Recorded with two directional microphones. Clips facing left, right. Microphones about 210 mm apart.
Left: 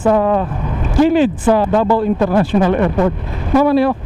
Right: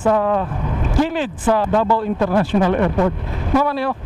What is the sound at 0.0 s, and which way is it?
A man's voice, 15° left (ahead or behind).